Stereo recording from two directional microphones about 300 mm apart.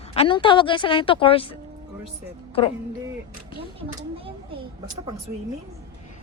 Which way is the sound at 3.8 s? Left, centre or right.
Centre.